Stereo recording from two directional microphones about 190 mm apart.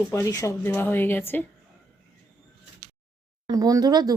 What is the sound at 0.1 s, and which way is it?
Speech, 15° left (ahead or behind).